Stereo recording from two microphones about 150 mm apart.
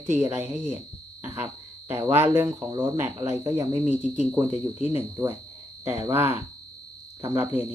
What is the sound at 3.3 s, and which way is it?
Speech, 20° right (ahead or behind).